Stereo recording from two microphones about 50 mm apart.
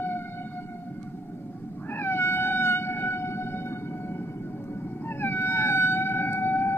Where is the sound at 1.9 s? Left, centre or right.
Left.